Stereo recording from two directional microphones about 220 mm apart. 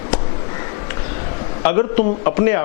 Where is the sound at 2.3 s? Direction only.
15° left (ahead or behind).